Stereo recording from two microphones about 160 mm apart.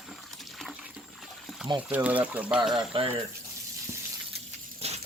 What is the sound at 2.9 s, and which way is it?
Speech, 35° right (ahead or behind).